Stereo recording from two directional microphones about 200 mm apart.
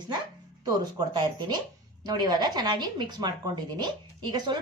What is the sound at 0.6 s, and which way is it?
A woman's voice, 20° right (ahead or behind).